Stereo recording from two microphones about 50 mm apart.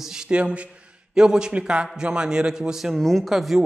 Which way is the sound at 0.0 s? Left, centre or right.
Centre.